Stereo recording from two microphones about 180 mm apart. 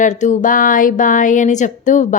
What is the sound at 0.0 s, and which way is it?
A woman's voice, 45° left (ahead or behind).